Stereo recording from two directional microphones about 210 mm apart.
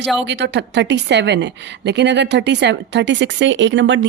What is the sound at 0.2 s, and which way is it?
A woman's voice, 55° right (ahead or behind).